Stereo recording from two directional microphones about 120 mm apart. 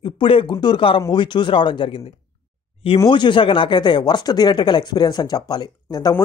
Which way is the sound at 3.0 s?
40° left (ahead or behind).